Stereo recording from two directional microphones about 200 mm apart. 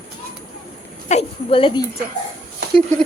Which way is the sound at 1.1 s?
30° left (ahead or behind).